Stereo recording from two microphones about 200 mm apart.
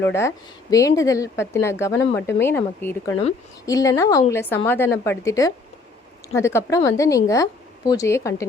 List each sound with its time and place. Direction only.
0.0 s a woman's voice: 15° left (ahead or behind)